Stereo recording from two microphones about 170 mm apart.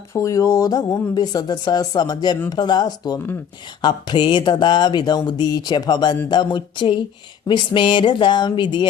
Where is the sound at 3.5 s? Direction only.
25° left (ahead or behind).